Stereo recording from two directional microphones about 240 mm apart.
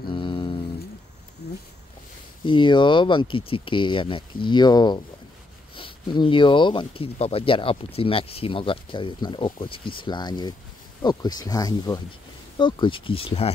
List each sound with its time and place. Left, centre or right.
0.1 s music: centre
2.4 s speech: centre